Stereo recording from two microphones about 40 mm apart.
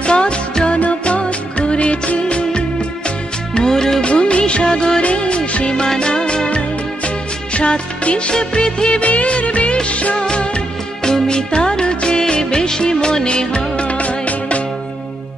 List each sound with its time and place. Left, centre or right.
0.0 s music: left
0.7 s music: left
3.5 s music: centre
4.0 s music of bollywood: left
5.0 s music: left
8.4 s music of bollywood: left
9.0 s music of bollywood: left
10.1 s music: left